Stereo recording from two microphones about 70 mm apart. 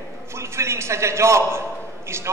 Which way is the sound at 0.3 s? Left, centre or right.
Right.